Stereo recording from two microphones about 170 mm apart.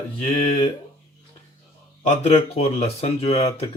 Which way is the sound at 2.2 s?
40° left (ahead or behind).